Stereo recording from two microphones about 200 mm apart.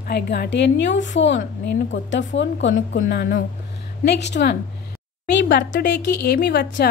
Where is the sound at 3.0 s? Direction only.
50° left (ahead or behind).